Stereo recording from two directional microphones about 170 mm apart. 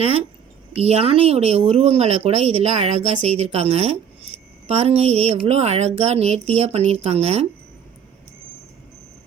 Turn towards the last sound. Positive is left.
turn(degrees=-40)  # may be behind; listen again after turning